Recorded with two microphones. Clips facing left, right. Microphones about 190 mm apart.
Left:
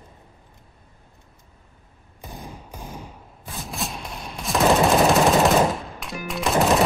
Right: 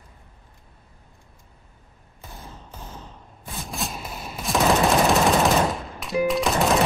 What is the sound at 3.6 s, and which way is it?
Gunshot, centre (ahead or behind).